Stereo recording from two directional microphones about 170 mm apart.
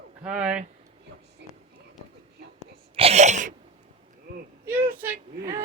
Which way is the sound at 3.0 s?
40° right (ahead or behind).